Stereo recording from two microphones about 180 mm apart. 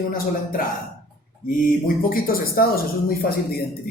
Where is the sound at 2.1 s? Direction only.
55° left (ahead or behind).